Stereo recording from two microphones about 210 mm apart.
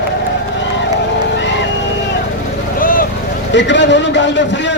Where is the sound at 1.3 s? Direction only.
60° left (ahead or behind).